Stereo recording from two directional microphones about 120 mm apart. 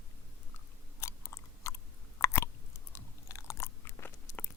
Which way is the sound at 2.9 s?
25° left (ahead or behind).